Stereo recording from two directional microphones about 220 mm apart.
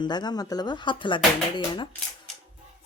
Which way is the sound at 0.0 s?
20° left (ahead or behind).